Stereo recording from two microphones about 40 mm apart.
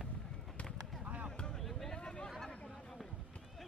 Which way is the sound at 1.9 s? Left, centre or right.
Left.